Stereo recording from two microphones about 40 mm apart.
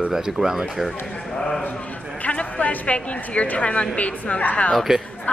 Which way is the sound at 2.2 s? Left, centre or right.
Left.